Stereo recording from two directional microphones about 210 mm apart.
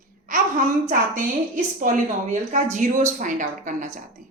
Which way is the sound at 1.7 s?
40° right (ahead or behind).